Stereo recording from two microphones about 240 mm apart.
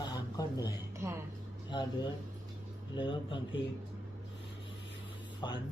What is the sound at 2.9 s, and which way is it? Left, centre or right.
Speech, left.